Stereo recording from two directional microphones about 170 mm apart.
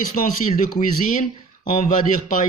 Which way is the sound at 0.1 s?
50° left (ahead or behind).